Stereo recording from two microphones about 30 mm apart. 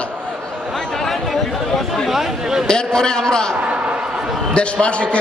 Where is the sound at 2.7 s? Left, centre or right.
Left.